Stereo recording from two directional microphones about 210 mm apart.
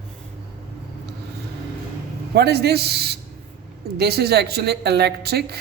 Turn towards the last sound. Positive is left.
turn(degrees=-50)  # may be behind; listen again after turning